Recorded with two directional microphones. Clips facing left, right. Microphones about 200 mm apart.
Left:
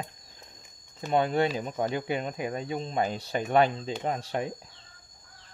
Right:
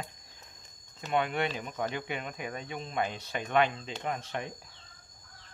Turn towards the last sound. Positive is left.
turn(degrees=35)  # may be behind; listen again after turning